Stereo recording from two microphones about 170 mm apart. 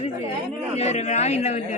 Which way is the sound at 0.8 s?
40° left (ahead or behind).